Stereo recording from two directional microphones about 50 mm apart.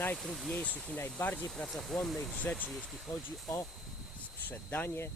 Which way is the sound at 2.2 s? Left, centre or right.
Left.